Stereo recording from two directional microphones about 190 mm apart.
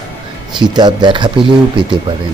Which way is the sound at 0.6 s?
25° right (ahead or behind).